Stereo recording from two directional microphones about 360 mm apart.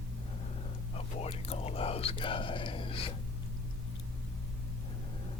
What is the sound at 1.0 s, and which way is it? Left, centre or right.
Whispering, centre.